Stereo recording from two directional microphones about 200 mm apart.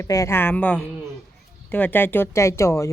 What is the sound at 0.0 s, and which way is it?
Speech, 15° left (ahead or behind).